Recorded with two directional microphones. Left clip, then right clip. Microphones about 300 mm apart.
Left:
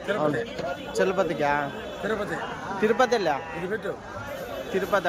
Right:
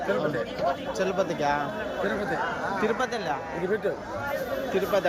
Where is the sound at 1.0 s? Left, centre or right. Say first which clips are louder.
Left 3 dB; centre.